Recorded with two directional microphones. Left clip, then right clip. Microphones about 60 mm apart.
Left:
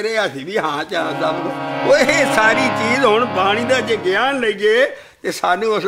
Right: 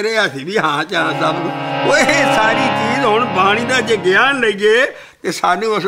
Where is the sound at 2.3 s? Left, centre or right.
Left.